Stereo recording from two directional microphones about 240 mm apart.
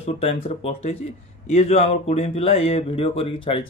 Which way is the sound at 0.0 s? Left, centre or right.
Left.